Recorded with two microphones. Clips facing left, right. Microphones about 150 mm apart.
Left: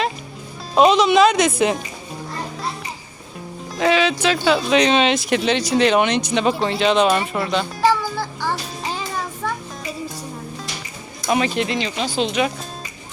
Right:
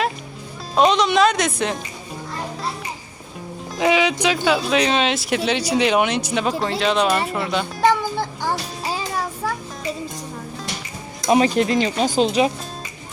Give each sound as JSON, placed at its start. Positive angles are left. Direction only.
{"t": 0.8, "sound": "speech", "side_deg": 5}
{"t": 3.8, "sound": "speech", "side_deg": -15}
{"t": 7.9, "sound": "music", "side_deg": -20}
{"t": 11.3, "sound": "speech", "side_deg": -35}